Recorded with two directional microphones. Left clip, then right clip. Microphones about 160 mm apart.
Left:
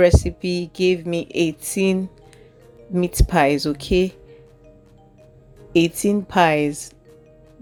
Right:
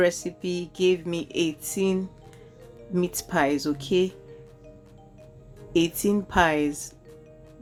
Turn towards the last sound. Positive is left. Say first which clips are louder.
# left 6 dB
turn(degrees=25)  # may be behind; listen again after turning